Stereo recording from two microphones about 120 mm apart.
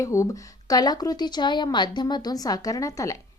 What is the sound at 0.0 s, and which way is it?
A woman's voice, 25° left (ahead or behind).